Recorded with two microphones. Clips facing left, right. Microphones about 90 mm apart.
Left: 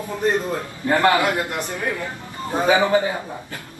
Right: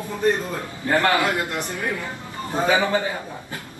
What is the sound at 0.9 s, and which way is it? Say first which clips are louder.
A man's voice: left 2 dB; 20° left (ahead or behind).